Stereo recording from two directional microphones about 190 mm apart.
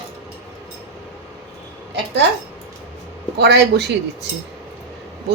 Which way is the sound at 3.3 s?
60° right (ahead or behind).